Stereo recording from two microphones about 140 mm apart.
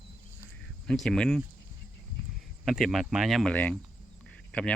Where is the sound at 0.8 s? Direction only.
5° left (ahead or behind).